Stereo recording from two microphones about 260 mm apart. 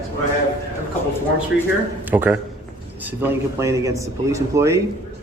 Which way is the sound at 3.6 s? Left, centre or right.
Centre.